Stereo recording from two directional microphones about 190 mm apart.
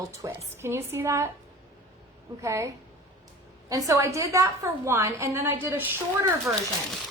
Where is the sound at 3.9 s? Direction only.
15° right (ahead or behind).